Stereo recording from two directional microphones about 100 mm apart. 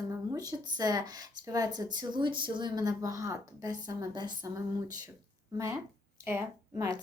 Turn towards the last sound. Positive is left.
turn(degrees=-25)  # may be behind; listen again after turning